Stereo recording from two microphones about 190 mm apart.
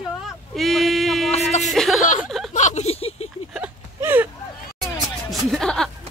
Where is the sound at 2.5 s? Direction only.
35° left (ahead or behind).